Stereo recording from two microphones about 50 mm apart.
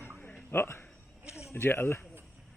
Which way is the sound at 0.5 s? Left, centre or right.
Left.